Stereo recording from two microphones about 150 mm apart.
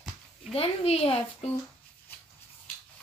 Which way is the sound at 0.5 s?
40° left (ahead or behind).